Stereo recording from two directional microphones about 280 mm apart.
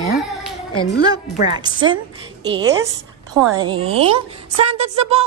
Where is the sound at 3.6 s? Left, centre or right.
Centre.